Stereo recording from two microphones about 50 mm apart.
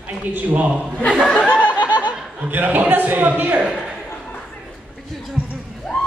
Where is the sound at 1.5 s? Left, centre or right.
Left.